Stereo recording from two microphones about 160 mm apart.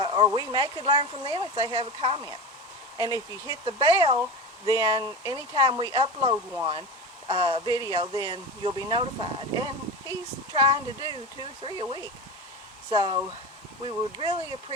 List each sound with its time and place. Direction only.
0.0 s bow-wow: 30° right (ahead or behind)
0.3 s speech: 25° right (ahead or behind)